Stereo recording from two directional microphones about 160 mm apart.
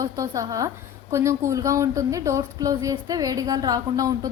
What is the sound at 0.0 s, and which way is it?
A woman's voice, 20° right (ahead or behind).